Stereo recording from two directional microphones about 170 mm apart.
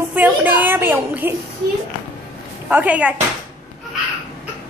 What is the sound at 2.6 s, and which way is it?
Speech, 10° right (ahead or behind).